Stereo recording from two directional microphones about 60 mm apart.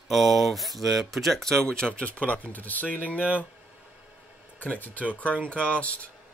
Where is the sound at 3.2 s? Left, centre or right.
Right.